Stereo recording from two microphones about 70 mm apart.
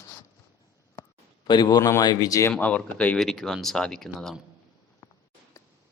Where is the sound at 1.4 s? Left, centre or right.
Left.